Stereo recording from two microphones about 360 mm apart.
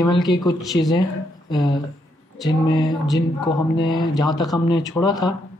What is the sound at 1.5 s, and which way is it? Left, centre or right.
Speech, centre.